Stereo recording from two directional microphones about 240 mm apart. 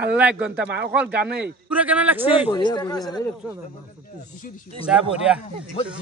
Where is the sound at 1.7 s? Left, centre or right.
Centre.